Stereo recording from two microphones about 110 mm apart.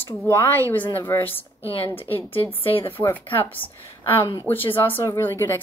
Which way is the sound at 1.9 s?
20° left (ahead or behind).